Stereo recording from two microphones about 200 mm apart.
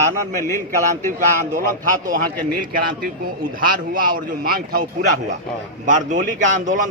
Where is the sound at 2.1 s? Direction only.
45° right (ahead or behind).